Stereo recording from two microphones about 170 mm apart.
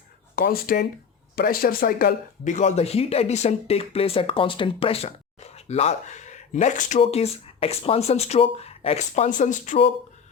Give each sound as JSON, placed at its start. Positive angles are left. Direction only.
{"t": 0.3, "sound": "speech", "side_deg": 60}